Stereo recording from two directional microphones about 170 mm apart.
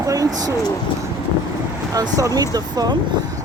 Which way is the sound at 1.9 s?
20° right (ahead or behind).